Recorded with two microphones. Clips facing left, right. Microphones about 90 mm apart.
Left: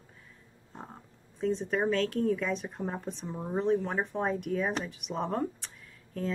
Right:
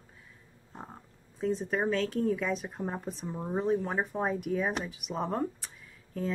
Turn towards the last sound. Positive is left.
turn(degrees=0)  # may be behind; listen again after turning